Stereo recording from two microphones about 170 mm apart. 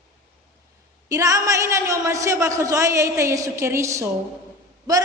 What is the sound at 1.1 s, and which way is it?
A man's voice, 20° right (ahead or behind).